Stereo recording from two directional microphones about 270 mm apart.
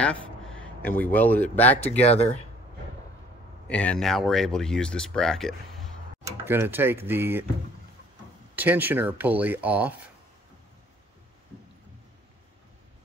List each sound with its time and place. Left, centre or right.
0.0 s speech: centre
2.0 s speech: left
3.6 s speech: centre
8.5 s speech: centre